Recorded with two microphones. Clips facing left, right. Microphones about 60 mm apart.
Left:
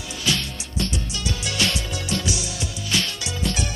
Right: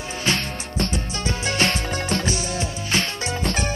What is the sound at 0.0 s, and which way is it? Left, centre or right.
Music, right.